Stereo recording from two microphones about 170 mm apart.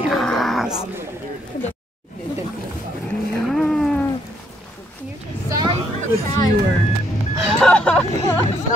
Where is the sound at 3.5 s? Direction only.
Centre (ahead or behind).